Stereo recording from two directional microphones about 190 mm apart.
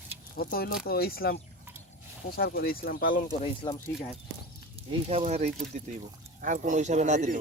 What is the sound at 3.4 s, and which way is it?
Speech, 25° left (ahead or behind).